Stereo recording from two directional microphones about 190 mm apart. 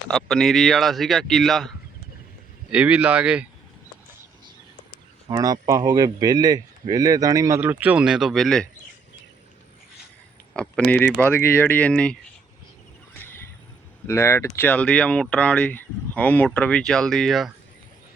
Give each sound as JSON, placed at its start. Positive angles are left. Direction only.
{"t": 0.1, "sound": "speech", "side_deg": 0}
{"t": 5.3, "sound": "speech", "side_deg": -20}
{"t": 10.5, "sound": "speech", "side_deg": 5}
{"t": 13.1, "sound": "a sound", "side_deg": 10}
{"t": 14.1, "sound": "speech", "side_deg": 15}